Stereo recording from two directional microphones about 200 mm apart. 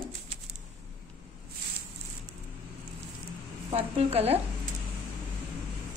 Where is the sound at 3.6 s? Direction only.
30° right (ahead or behind).